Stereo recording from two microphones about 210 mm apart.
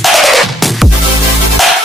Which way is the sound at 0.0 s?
Centre (ahead or behind).